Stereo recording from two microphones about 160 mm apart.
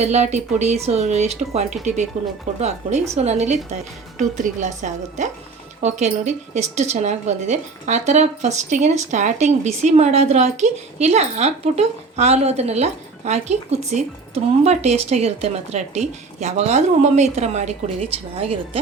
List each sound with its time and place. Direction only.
0.0 s speech: 45° right (ahead or behind)